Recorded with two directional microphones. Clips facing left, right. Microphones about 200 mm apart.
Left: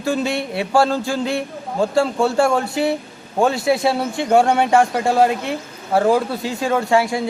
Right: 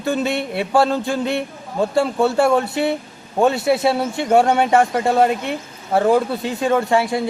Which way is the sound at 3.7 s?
Centre (ahead or behind).